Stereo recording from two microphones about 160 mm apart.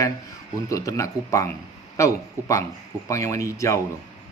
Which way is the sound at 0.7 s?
20° left (ahead or behind).